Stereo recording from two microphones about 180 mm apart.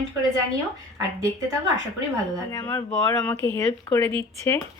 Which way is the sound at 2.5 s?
15° left (ahead or behind).